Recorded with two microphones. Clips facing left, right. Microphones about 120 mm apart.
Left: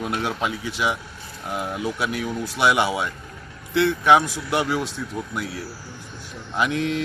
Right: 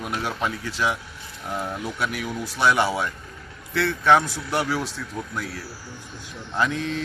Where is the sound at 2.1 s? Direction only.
5° right (ahead or behind).